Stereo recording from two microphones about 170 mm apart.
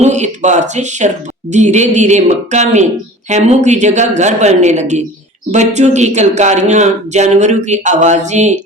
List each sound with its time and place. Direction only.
0.0 s speech: 45° right (ahead or behind)